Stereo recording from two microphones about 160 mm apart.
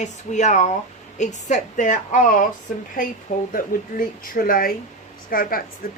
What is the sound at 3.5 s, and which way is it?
Speech, 60° left (ahead or behind).